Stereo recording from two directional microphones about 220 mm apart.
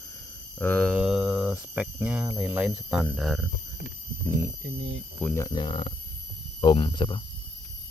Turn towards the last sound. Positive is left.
turn(degrees=20)  # may be behind; listen again after turning